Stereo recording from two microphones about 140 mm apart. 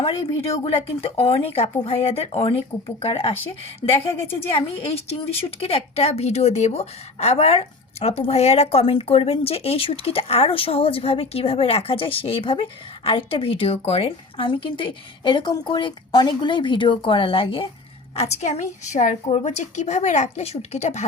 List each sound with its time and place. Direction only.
0.0 s a woman's voice: 40° left (ahead or behind)
5.5 s a woman's voice: 45° left (ahead or behind)
18.2 s a woman's voice: 55° left (ahead or behind)
19.2 s a woman's voice: 50° left (ahead or behind)